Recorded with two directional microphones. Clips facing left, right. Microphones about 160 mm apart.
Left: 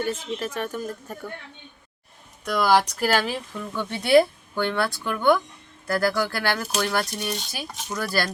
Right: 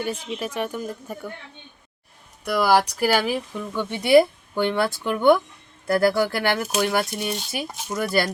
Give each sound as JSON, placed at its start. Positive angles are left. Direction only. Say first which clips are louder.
{"t": 0.0, "sound": "speech", "louder": "even", "side_deg": -10}
{"t": 2.4, "sound": "speech", "louder": "right 1 dB", "side_deg": -10}